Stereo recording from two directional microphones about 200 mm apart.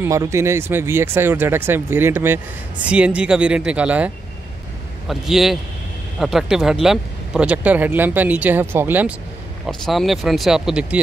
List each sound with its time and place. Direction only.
0.0 s speech: 15° right (ahead or behind)